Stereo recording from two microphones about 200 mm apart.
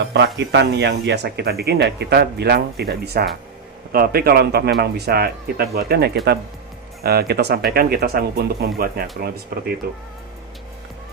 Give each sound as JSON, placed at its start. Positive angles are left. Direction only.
{"t": 0.0, "sound": "speech", "side_deg": -60}